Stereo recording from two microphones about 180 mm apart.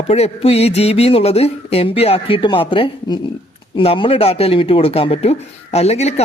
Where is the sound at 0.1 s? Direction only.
35° left (ahead or behind).